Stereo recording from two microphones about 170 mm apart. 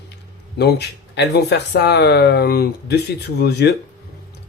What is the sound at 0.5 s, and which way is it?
Speech, 80° left.